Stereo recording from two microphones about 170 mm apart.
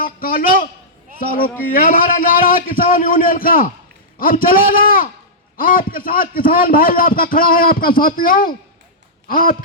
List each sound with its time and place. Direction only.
0.0 s a man's voice: 55° left (ahead or behind)